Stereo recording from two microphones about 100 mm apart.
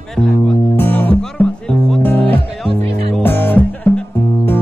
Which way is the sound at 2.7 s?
90° right.